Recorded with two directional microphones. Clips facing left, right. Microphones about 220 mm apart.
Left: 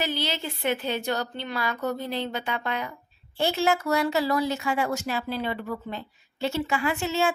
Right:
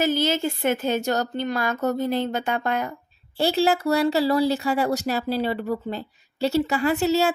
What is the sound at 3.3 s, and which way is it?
Speech, 35° right (ahead or behind).